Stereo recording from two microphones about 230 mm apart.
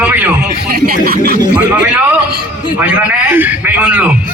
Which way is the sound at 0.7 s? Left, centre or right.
Right.